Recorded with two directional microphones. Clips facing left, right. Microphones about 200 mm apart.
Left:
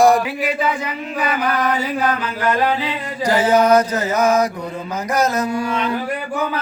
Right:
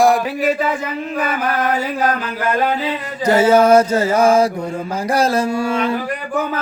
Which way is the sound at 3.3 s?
25° right (ahead or behind).